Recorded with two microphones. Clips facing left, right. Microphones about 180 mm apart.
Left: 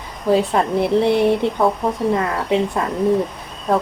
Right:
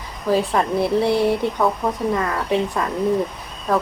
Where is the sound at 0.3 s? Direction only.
20° left (ahead or behind).